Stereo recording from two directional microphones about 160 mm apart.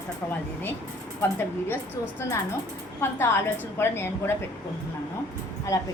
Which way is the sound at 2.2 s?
15° left (ahead or behind).